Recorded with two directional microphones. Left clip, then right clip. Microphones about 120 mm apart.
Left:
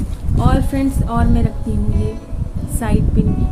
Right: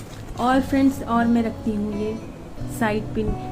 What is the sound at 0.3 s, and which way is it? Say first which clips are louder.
A woman's voice: even; 25° left (ahead or behind).